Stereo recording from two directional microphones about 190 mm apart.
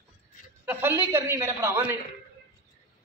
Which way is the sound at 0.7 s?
10° right (ahead or behind).